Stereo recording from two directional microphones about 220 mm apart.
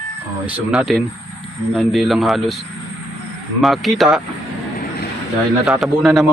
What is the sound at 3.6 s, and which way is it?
Speech, centre (ahead or behind).